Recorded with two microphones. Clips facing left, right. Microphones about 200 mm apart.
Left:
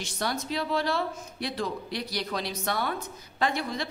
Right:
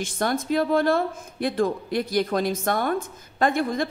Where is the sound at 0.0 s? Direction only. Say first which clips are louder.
Right 6 dB; 50° right (ahead or behind).